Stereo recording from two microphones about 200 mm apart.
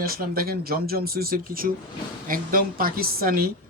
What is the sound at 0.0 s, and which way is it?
Speech, 45° right (ahead or behind).